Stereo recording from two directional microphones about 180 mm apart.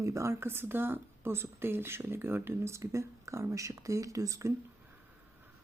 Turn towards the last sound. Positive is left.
turn(degrees=-20)  # may be behind; listen again after turning